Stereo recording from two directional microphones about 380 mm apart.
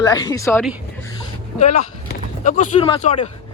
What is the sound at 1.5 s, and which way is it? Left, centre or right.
Speech, centre.